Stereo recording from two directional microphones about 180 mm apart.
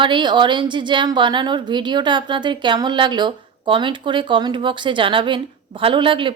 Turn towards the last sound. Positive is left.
turn(degrees=-30)  # may be behind; listen again after turning